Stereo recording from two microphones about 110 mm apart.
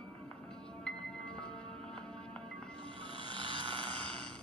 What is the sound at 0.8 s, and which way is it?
Music, 5° left (ahead or behind).